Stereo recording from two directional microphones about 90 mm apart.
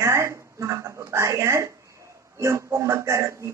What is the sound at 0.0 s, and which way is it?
Speech, 30° right (ahead or behind).